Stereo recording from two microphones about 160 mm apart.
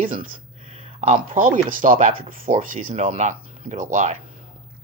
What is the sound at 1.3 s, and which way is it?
Speech, 60° right (ahead or behind).